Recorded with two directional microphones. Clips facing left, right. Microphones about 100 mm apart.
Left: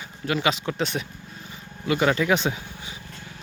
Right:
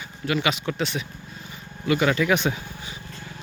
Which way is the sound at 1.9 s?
25° left (ahead or behind).